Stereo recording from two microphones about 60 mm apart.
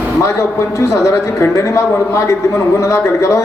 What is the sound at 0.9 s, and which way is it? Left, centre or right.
A man's voice, left.